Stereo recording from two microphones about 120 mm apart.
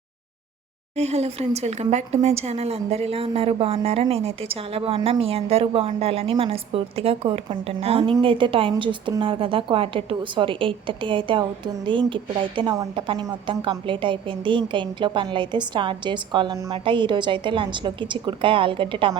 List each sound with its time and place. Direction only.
0.9 s a woman's voice: 60° right (ahead or behind); by 19.2 s 45° right (ahead or behind)